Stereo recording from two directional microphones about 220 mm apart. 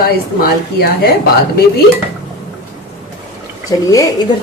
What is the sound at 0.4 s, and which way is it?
Speech, 45° left (ahead or behind).